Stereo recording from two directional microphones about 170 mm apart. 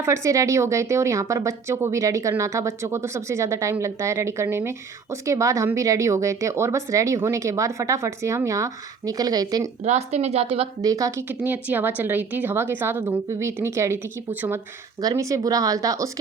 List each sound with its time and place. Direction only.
0.0 s a woman's voice: 15° right (ahead or behind)
9.8 s speech: 40° right (ahead or behind)
10.8 s a woman's voice: 20° right (ahead or behind)
15.0 s a woman's voice: 20° right (ahead or behind)